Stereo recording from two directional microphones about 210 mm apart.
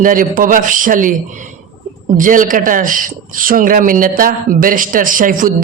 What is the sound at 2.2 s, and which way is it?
A man's voice, 40° right (ahead or behind).